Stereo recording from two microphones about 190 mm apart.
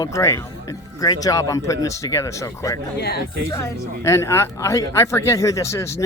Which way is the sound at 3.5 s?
15° left (ahead or behind).